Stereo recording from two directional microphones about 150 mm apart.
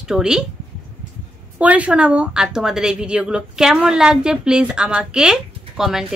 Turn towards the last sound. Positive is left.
turn(degrees=-5)  # may be behind; listen again after turning